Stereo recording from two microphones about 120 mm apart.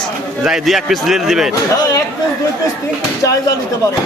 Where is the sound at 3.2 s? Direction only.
30° left (ahead or behind).